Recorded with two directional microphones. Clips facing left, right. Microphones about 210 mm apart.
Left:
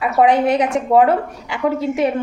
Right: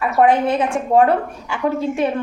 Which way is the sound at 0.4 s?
15° left (ahead or behind).